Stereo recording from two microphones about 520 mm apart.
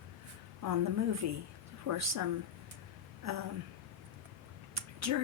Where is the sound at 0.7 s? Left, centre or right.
Right.